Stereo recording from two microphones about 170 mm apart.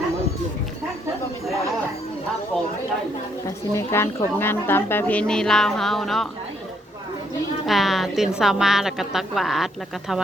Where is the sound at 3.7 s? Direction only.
15° left (ahead or behind).